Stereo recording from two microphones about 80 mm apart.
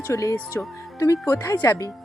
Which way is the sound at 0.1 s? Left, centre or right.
Left.